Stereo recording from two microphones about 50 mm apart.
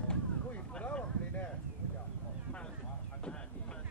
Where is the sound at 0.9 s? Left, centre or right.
Left.